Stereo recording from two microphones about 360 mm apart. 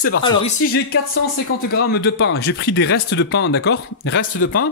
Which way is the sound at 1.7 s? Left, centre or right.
Left.